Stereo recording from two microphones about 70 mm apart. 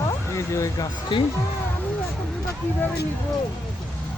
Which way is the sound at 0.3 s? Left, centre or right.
Left.